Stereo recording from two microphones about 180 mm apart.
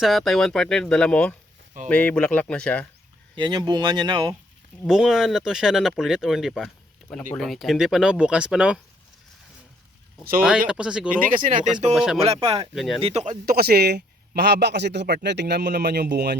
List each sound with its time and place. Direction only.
0.0 s speech: centre (ahead or behind)
3.3 s speech: 25° right (ahead or behind)
4.9 s speech: centre (ahead or behind)
10.7 s speech: 5° right (ahead or behind)
11.3 s speech: 45° right (ahead or behind)
11.9 s speech: 5° right (ahead or behind)
12.2 s speech: 30° right (ahead or behind)
12.7 s speech: centre (ahead or behind)
13.0 s speech: 35° right (ahead or behind)
13.4 s a man's voice: 55° right (ahead or behind)